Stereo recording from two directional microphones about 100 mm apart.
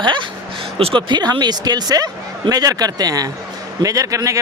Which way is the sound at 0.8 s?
70° right (ahead or behind).